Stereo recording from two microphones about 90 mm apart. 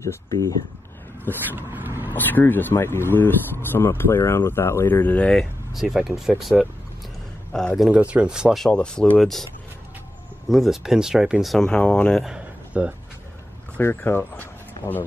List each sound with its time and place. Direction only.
0.0 s speech: 35° left (ahead or behind)
1.5 s vehicle: 20° right (ahead or behind)
2.1 s speech: 20° left (ahead or behind); by 6.5 s 5° right (ahead or behind)
7.5 s speech: 5° left (ahead or behind)
7.9 s speech: 15° right (ahead or behind)
8.6 s speech: 10° left (ahead or behind)
10.5 s speech: centre (ahead or behind)
11.5 s speech: 10° left (ahead or behind)
12.3 s a sound: 15° right (ahead or behind)
13.7 s speech: 25° left (ahead or behind)